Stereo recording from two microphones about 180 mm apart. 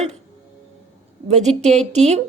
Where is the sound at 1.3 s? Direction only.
40° right (ahead or behind).